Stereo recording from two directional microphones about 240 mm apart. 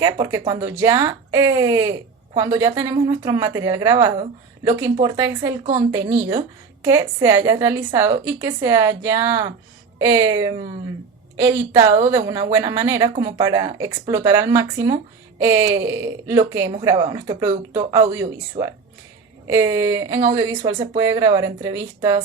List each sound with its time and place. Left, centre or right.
0.0 s speech: centre